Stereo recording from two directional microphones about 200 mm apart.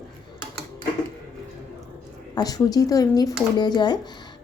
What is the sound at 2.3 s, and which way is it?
A woman's voice, 20° left (ahead or behind).